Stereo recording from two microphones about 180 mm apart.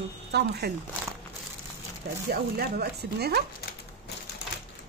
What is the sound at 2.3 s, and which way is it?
Speech, 60° right (ahead or behind).